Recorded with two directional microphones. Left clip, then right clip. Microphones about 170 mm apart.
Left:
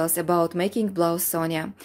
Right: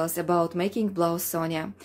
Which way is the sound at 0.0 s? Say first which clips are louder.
Left 2 dB; 25° left (ahead or behind).